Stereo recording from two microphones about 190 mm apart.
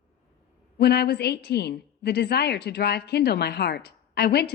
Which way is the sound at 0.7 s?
60° left (ahead or behind).